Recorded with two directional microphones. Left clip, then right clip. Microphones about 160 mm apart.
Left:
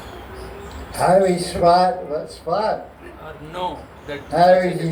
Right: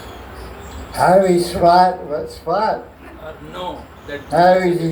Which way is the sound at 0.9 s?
50° right (ahead or behind).